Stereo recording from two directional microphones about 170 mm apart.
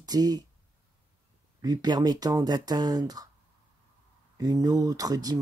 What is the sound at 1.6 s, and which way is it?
Speech, 25° right (ahead or behind).